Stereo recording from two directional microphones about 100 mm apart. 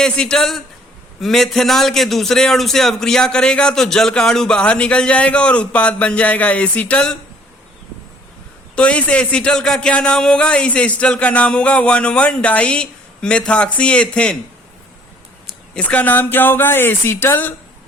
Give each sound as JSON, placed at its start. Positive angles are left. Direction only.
{"t": 0.0, "sound": "a man's voice", "side_deg": 5}
{"t": 8.7, "sound": "a man's voice", "side_deg": 10}
{"t": 15.7, "sound": "speech", "side_deg": 15}